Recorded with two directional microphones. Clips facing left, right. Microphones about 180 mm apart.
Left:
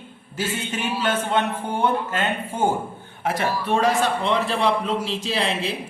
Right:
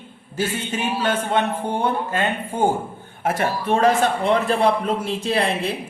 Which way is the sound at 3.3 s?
50° right (ahead or behind).